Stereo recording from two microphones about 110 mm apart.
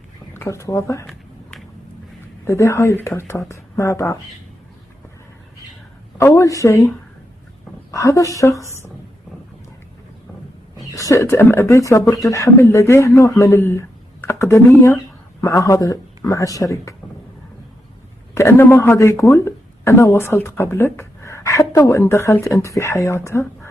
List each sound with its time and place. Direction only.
0.3 s speech: 25° left (ahead or behind)
2.4 s speech: 25° left (ahead or behind)
6.1 s speech: 30° left (ahead or behind)
7.9 s speech: 30° left (ahead or behind)
10.8 s speech: 30° left (ahead or behind)
18.3 s speech: 25° left (ahead or behind)